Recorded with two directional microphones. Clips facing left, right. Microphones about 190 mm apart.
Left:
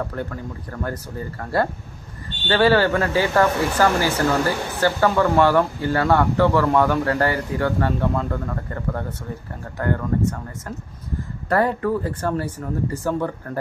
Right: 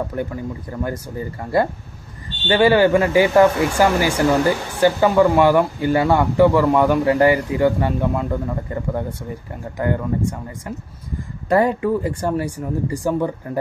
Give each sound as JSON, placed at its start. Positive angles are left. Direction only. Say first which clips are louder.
{"t": 0.1, "sound": "speech", "louder": "right 4 dB", "side_deg": -15}
{"t": 2.4, "sound": "speech", "louder": "right 3 dB", "side_deg": -15}
{"t": 11.4, "sound": "speech", "louder": "right 3 dB", "side_deg": -15}